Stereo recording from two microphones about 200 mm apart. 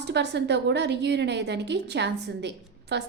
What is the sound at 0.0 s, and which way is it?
A woman's voice, 60° right (ahead or behind).